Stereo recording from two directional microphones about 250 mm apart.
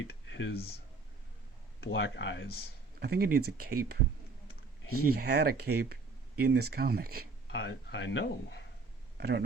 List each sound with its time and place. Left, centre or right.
0.0 s clicking: left
1.8 s speech: left
3.0 s speech: right
4.9 s speech: right
7.5 s speech: left
9.1 s speech: right